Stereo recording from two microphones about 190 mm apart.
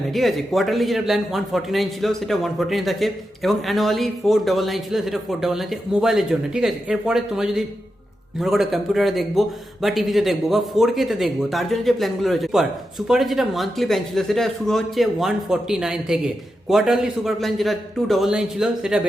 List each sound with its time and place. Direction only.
0.1 s a man's voice: centre (ahead or behind)